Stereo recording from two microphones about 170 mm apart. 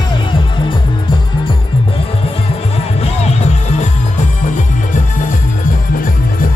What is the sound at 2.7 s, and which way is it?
Music, 40° left (ahead or behind).